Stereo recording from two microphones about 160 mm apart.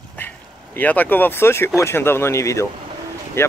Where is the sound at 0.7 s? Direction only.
10° left (ahead or behind).